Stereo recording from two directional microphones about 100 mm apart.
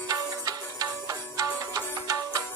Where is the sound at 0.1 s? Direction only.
40° right (ahead or behind).